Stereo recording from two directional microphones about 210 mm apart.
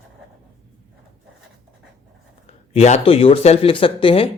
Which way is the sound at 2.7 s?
30° left (ahead or behind).